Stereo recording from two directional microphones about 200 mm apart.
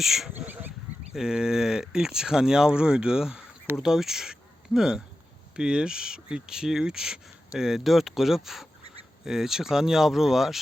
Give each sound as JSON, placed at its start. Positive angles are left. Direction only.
{"t": 0.0, "sound": "speech", "side_deg": 0}